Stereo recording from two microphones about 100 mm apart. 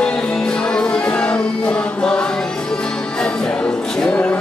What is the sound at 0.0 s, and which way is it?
Music, 10° left (ahead or behind).